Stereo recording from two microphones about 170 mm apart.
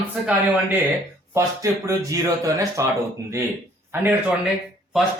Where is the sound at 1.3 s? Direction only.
20° right (ahead or behind).